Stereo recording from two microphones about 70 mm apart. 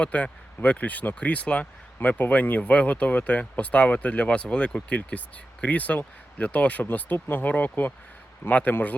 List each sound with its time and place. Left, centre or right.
0.0 s speech: centre